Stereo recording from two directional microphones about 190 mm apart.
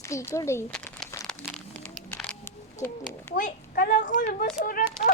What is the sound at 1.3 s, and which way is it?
Crumpling, centre (ahead or behind).